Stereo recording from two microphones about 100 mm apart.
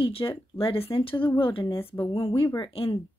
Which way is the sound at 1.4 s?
60° left (ahead or behind).